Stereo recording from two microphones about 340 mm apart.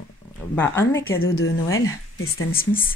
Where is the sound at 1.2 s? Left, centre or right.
Left.